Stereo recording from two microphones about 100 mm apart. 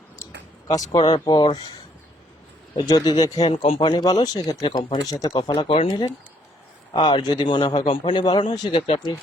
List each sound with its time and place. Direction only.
0.7 s a man's voice: 45° left (ahead or behind)
2.7 s speech: 40° left (ahead or behind)
3.4 s a man's voice: 80° left
5.9 s a man's voice: 40° left (ahead or behind)